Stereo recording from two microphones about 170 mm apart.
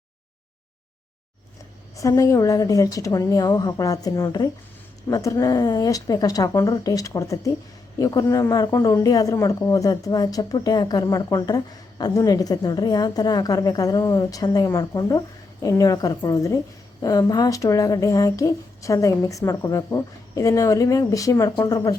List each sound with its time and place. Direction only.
2.0 s speech: 20° left (ahead or behind)